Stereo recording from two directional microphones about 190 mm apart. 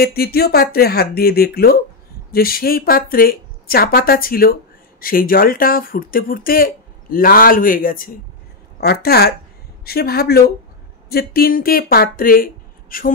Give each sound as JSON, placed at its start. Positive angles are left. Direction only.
{"t": 0.0, "sound": "speech", "side_deg": 55}